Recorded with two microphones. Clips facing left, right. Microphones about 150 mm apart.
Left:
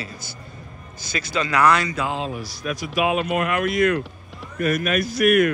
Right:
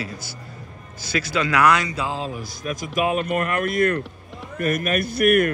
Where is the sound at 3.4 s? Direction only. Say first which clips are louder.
Left 1 dB; 45° right (ahead or behind).